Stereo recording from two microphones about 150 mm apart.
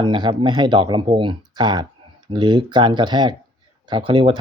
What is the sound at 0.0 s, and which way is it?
Speech, 30° right (ahead or behind).